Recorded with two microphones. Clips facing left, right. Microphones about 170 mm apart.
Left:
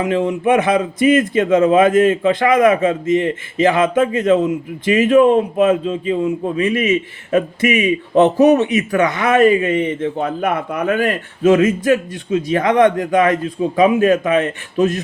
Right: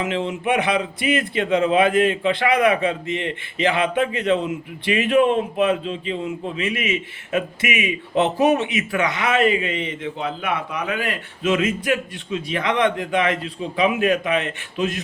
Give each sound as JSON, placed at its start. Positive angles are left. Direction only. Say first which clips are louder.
{"t": 0.1, "sound": "a man's voice", "louder": "left 7 dB", "side_deg": 45}